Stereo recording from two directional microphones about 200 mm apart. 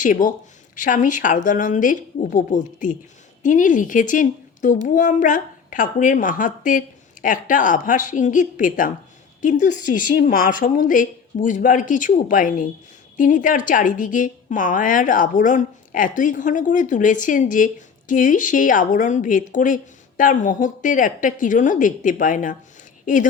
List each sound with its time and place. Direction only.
0.0 s a woman's voice: 40° left (ahead or behind)